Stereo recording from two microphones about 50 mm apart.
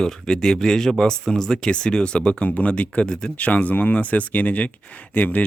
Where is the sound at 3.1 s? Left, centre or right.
Centre.